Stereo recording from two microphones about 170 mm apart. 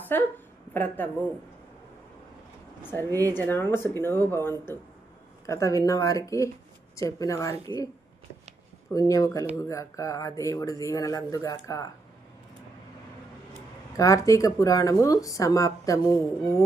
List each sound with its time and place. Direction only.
0.1 s a woman's voice: 10° left (ahead or behind)
3.0 s speech: 20° right (ahead or behind)
3.3 s speech: 10° left (ahead or behind)
8.9 s speech: 20° left (ahead or behind)
13.9 s speech: 20° left (ahead or behind)